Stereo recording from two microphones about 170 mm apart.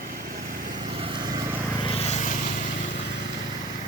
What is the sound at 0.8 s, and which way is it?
Vehicle, 30° right (ahead or behind).